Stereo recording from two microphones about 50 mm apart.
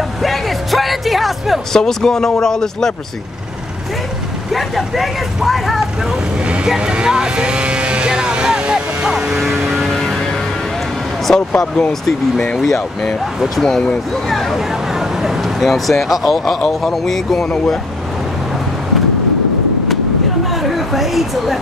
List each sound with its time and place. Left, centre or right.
0.2 s music: centre
1.7 s speech: centre
4.5 s speech: centre
6.8 s vehicle: centre
11.2 s speech: centre
14.3 s a sound: centre
15.6 s speech: centre
20.6 s a sound: centre